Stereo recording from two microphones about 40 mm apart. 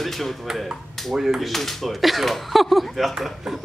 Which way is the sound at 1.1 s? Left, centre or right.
Centre.